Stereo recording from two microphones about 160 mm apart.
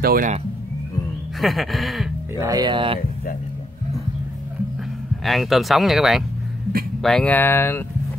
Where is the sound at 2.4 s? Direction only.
25° right (ahead or behind).